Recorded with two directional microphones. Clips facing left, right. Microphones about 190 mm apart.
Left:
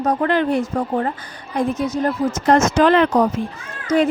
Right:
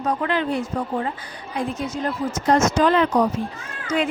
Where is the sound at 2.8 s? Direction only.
70° left (ahead or behind).